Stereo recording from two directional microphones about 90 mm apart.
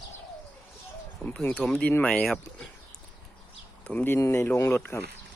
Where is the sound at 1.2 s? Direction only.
15° left (ahead or behind).